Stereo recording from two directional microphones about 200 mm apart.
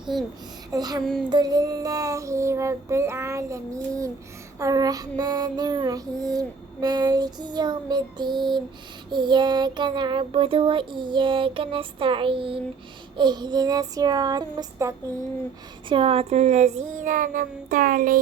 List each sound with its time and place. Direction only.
0.7 s female singing: 20° right (ahead or behind)
1.3 s child singing: 20° right (ahead or behind)
4.6 s female singing: 20° right (ahead or behind)
15.9 s child singing: 30° right (ahead or behind); by 18.2 s 45° right (ahead or behind)